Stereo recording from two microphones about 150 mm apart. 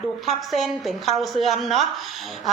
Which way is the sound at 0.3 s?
Centre (ahead or behind).